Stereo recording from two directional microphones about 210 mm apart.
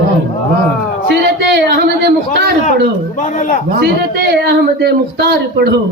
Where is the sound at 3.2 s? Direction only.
35° left (ahead or behind).